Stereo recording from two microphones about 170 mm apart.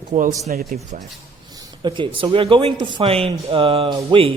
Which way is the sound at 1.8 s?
30° right (ahead or behind).